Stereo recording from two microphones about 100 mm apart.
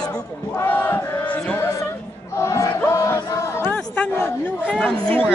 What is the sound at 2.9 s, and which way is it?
Music, 30° left (ahead or behind).